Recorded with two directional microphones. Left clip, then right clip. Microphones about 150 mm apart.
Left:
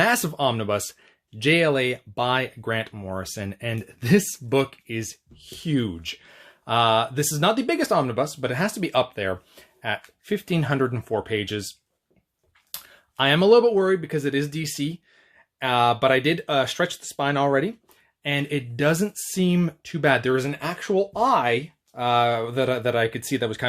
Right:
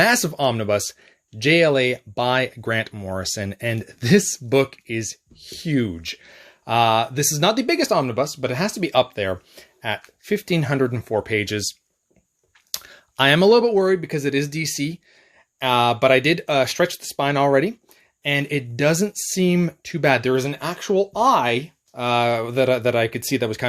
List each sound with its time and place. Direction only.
0.0 s speech: 25° right (ahead or behind)
12.7 s speech: 45° right (ahead or behind)